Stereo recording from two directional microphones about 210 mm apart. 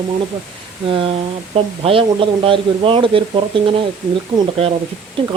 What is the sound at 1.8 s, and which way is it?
Speech, 25° right (ahead or behind).